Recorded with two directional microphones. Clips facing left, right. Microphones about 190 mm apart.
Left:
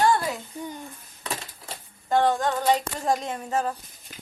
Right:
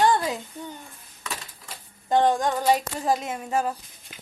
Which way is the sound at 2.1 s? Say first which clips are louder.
Right 1 dB; 15° right (ahead or behind).